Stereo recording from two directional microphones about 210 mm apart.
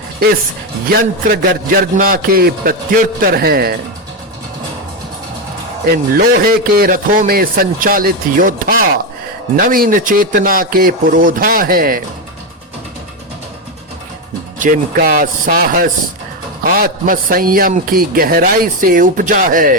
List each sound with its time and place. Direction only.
1.3 s a man's voice: 45° right (ahead or behind)
5.9 s a man's voice: 45° right (ahead or behind)
14.6 s a man's voice: 40° right (ahead or behind)